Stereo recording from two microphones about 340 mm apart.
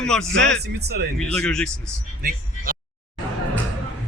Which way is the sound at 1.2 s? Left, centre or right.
Centre.